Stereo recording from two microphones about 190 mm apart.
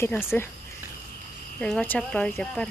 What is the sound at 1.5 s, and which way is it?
Speech, 5° left (ahead or behind).